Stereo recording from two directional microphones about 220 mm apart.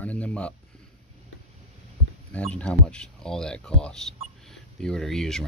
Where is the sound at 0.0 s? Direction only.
5° left (ahead or behind).